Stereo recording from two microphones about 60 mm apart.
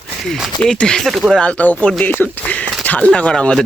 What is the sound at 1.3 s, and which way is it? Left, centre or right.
Speech, left.